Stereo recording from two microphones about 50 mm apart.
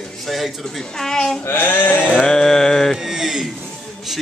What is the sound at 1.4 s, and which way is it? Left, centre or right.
Speech, left.